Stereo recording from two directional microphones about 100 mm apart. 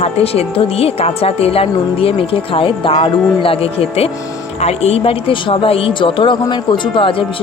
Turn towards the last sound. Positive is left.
turn(degrees=55)  # may be behind; listen again after turning